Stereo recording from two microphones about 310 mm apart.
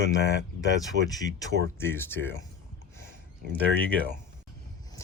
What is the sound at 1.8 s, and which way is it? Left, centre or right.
Speech, centre.